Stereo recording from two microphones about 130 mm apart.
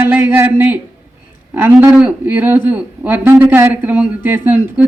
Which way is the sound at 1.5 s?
15° right (ahead or behind).